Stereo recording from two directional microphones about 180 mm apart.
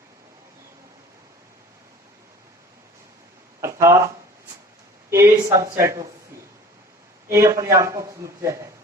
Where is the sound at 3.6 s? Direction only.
15° right (ahead or behind).